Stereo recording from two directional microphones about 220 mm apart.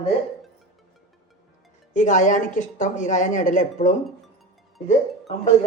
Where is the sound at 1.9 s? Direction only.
35° left (ahead or behind).